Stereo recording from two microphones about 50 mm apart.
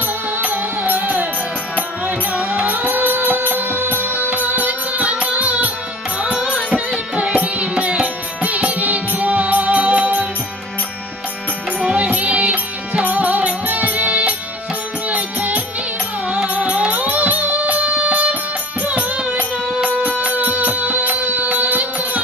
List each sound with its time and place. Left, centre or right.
0.0 s music: right
11.9 s music: right